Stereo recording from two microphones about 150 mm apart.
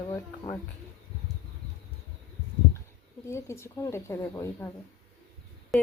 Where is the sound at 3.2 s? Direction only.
20° left (ahead or behind).